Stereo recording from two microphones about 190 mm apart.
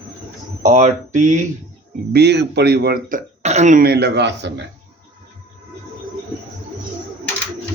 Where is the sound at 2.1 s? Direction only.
65° right (ahead or behind).